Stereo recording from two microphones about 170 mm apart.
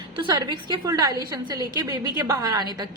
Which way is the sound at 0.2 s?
25° right (ahead or behind).